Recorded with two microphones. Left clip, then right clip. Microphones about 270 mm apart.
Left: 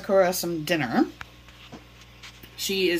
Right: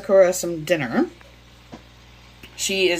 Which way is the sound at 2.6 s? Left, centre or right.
Centre.